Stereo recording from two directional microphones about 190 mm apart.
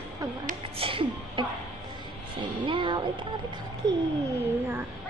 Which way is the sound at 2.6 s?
25° right (ahead or behind).